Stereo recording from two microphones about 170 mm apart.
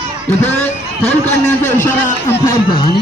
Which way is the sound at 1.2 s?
45° left (ahead or behind).